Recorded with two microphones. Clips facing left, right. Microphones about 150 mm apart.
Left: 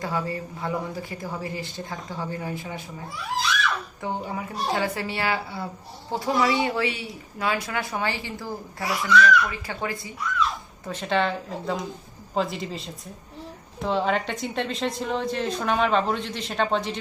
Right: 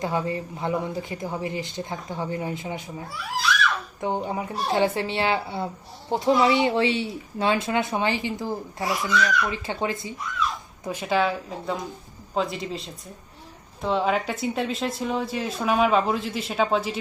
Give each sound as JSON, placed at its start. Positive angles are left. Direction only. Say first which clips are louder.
{"t": 0.0, "sound": "speech", "louder": "right 2 dB", "side_deg": -20}
{"t": 4.0, "sound": "speech", "louder": "right 5 dB", "side_deg": -20}
{"t": 10.8, "sound": "a woman's voice", "louder": "right 1 dB", "side_deg": -10}